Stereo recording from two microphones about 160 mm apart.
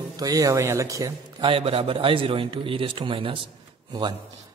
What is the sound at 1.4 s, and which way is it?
A man's voice, 35° right (ahead or behind).